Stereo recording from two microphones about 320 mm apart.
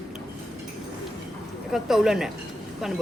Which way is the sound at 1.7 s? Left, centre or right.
Centre.